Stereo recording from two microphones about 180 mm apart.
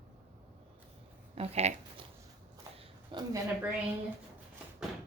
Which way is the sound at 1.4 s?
35° right (ahead or behind).